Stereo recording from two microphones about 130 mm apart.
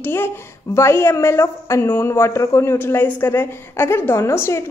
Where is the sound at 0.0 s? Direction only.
15° left (ahead or behind).